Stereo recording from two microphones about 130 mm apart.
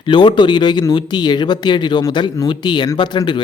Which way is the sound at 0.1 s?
35° left (ahead or behind).